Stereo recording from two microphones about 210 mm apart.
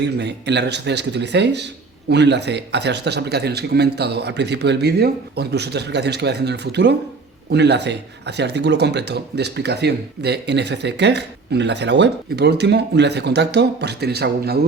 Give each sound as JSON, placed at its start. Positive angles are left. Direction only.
{"t": 0.0, "sound": "speech", "side_deg": -55}